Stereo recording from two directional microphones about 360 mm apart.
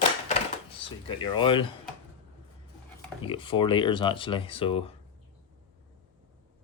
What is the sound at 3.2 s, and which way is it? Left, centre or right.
Speech, centre.